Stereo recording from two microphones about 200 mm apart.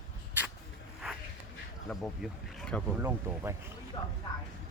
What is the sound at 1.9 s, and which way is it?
Speech, centre (ahead or behind).